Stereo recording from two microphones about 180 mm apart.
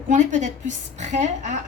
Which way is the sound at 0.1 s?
45° right (ahead or behind).